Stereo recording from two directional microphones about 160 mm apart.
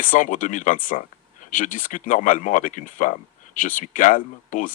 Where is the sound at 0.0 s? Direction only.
55° left (ahead or behind).